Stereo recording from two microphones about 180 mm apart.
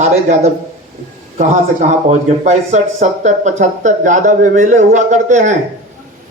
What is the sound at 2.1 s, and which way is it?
Speech, 40° right (ahead or behind).